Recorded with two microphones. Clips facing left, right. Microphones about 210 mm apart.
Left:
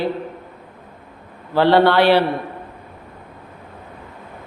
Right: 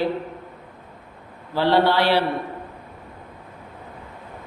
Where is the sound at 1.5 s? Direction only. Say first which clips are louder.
Left 5 dB; 60° left (ahead or behind).